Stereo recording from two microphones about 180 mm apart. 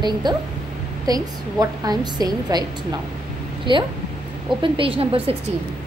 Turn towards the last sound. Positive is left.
turn(degrees=-30)  # may be behind; listen again after turning